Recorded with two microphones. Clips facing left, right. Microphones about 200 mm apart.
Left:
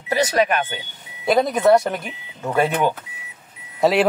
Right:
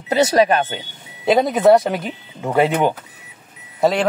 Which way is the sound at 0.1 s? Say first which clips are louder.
Right 4 dB; 30° right (ahead or behind).